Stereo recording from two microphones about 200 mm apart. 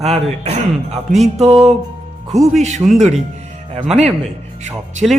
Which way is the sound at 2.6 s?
35° right (ahead or behind).